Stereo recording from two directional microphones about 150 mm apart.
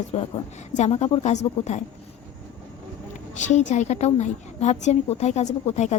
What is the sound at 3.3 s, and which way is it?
A woman's voice, 55° left (ahead or behind).